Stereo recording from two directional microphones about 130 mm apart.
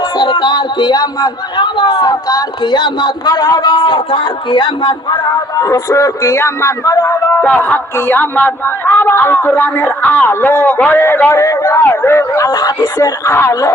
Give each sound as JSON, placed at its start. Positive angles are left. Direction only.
{"t": 0.2, "sound": "a man's voice", "side_deg": 35}
{"t": 7.4, "sound": "a man's voice", "side_deg": 15}